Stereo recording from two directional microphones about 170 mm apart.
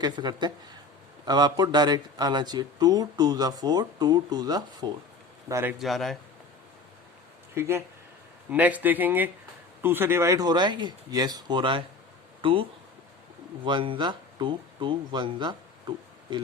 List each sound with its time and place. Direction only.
0.0 s speech: 25° right (ahead or behind)
5.8 s a man's voice: centre (ahead or behind)
7.5 s speech: 15° right (ahead or behind); by 12.6 s 30° right (ahead or behind)
13.7 s speech: 30° right (ahead or behind)